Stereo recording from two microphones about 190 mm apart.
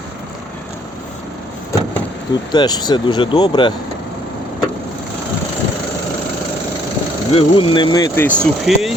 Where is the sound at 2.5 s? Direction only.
20° left (ahead or behind).